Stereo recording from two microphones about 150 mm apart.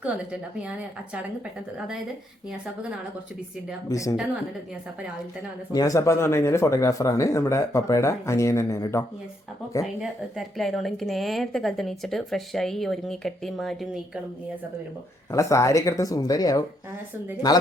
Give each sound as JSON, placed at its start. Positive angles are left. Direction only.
{"t": 0.0, "sound": "a woman's voice", "side_deg": -5}
{"t": 3.8, "sound": "speech", "side_deg": 25}
{"t": 5.7, "sound": "speech", "side_deg": 20}
{"t": 9.8, "sound": "a woman's voice", "side_deg": 0}
{"t": 15.3, "sound": "speech", "side_deg": 20}